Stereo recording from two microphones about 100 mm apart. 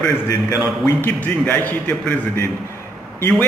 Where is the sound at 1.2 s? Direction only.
20° left (ahead or behind).